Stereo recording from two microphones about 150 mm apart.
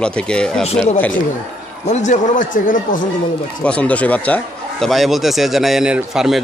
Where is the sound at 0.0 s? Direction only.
5° left (ahead or behind).